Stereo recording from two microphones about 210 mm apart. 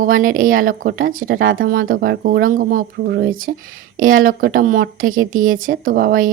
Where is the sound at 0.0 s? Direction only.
40° right (ahead or behind).